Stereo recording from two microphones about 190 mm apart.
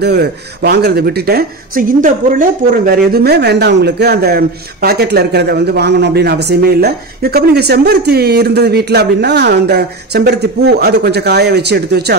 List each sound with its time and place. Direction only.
0.0 s speech: 60° right (ahead or behind)